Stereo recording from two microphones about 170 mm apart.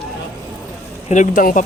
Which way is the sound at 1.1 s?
50° left (ahead or behind).